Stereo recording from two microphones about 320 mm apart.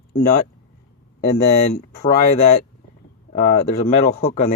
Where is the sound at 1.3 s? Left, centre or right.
Left.